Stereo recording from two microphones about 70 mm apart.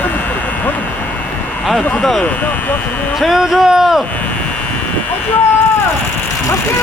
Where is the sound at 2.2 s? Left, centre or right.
Left.